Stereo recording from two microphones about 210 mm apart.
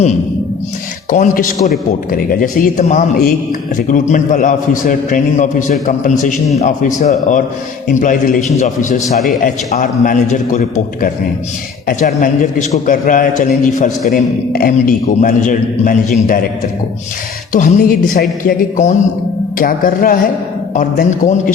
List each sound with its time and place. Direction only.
1.1 s a man's voice: 35° left (ahead or behind)
11.9 s a man's voice: 40° left (ahead or behind)
17.5 s a man's voice: 35° left (ahead or behind)